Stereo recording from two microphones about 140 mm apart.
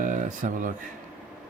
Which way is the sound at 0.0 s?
65° right (ahead or behind).